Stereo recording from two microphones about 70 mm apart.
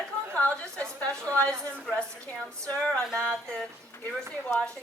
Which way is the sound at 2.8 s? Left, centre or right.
Centre.